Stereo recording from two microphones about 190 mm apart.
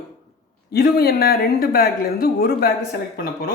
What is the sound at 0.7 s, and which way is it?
Speech, 55° left (ahead or behind).